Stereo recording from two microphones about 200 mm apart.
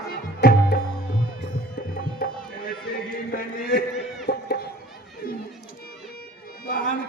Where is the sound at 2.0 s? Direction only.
50° left (ahead or behind).